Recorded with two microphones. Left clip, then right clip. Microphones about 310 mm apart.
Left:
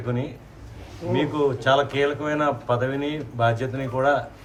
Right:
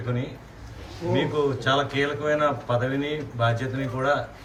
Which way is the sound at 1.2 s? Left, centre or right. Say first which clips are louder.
Left 2 dB; centre.